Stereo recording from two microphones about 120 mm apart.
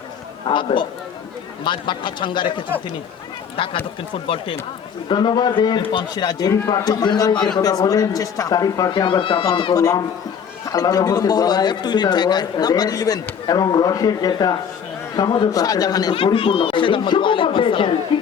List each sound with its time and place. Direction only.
0.4 s speech: 45° left (ahead or behind)
8.9 s speech: 45° left (ahead or behind)
9.7 s speech: 25° left (ahead or behind)
16.1 s speech: 50° left (ahead or behind)